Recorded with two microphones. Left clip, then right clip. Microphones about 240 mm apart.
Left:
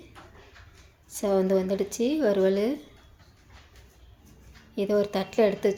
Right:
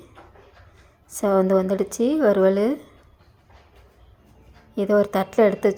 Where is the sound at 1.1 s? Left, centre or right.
Centre.